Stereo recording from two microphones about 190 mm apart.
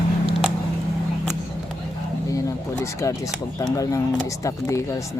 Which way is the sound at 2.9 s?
15° left (ahead or behind).